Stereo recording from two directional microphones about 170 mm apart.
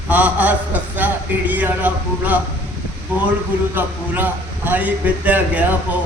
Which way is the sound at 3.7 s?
10° right (ahead or behind).